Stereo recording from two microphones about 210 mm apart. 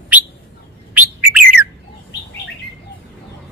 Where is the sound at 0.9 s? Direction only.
10° right (ahead or behind).